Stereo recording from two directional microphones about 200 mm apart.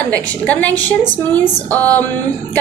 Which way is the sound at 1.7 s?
10° left (ahead or behind).